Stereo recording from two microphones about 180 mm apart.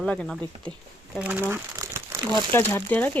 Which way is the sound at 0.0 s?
5° left (ahead or behind).